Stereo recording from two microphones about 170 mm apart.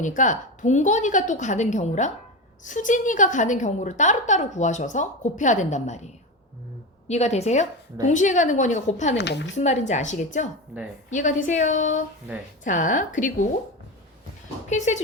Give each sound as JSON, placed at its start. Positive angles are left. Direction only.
{"t": 0.0, "sound": "a woman's voice", "side_deg": 50}
{"t": 7.1, "sound": "a woman's voice", "side_deg": 40}
{"t": 9.1, "sound": "speech", "side_deg": 90}
{"t": 9.6, "sound": "a woman's voice", "side_deg": 45}
{"t": 14.7, "sound": "a woman's voice", "side_deg": 45}